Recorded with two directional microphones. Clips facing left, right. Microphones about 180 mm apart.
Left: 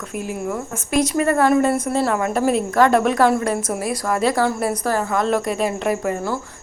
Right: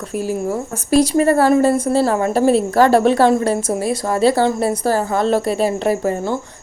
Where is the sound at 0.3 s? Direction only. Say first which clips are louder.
Right 4 dB; 35° right (ahead or behind).